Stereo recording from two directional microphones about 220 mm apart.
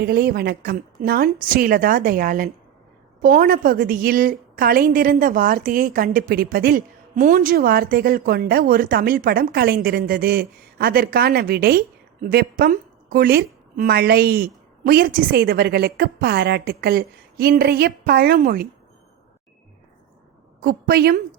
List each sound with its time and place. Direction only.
0.0 s a woman's voice: 45° right (ahead or behind)
20.6 s a woman's voice: 45° right (ahead or behind)